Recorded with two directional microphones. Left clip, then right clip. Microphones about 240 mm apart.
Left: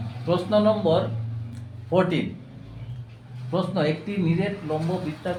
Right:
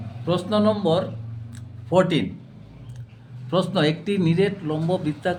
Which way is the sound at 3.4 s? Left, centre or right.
Right.